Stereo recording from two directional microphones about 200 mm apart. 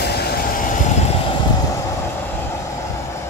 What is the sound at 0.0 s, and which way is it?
Vehicle, 50° left (ahead or behind).